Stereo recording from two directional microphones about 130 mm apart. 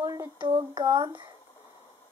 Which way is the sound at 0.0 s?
30° right (ahead or behind).